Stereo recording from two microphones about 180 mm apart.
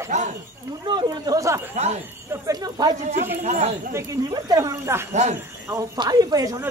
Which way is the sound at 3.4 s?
40° right (ahead or behind).